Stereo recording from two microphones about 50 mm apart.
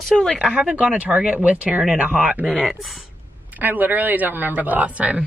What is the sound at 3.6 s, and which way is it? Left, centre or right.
Speech, right.